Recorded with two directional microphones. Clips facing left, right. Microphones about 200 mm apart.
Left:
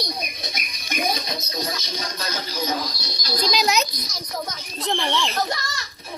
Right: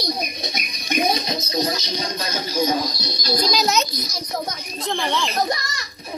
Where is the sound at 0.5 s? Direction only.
20° right (ahead or behind).